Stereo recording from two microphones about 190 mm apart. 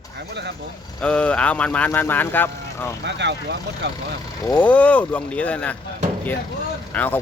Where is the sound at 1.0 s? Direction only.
5° left (ahead or behind).